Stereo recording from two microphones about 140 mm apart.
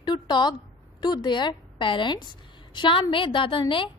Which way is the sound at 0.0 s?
30° left (ahead or behind).